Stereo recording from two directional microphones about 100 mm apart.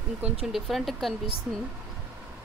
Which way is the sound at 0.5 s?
Centre (ahead or behind).